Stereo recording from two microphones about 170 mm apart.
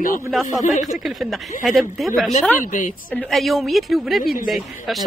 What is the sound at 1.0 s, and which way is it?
A woman's voice, centre (ahead or behind).